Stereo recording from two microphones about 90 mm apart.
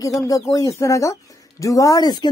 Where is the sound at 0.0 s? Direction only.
40° left (ahead or behind).